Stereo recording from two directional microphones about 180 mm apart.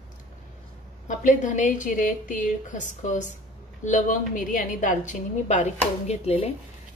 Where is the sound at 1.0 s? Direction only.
45° left (ahead or behind).